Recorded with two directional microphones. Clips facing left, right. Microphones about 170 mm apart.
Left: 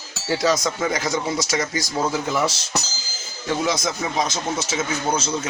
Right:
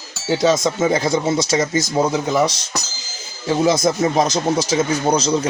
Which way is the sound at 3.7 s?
40° right (ahead or behind).